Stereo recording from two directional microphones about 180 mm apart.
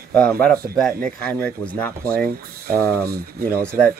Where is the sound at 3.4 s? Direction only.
5° left (ahead or behind).